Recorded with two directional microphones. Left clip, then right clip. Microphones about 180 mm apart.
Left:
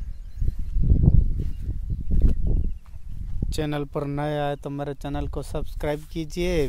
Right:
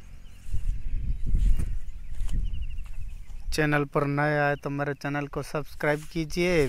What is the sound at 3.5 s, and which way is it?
Speech, 5° left (ahead or behind).